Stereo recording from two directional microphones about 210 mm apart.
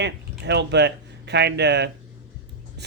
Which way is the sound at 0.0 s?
55° right (ahead or behind).